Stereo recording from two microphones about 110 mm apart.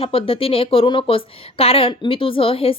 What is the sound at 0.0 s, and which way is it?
A woman's voice, 55° left (ahead or behind).